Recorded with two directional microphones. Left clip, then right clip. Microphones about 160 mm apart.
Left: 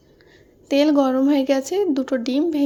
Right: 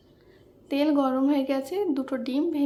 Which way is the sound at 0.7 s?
35° left (ahead or behind).